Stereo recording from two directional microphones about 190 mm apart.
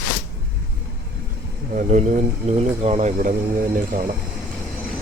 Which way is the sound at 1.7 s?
40° right (ahead or behind).